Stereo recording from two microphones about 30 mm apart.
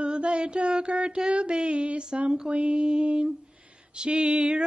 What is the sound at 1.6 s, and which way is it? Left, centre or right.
Music, right.